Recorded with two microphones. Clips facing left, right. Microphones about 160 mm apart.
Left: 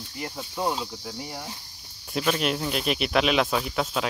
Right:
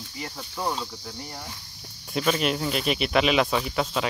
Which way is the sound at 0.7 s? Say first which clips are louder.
Left 1 dB; 5° left (ahead or behind).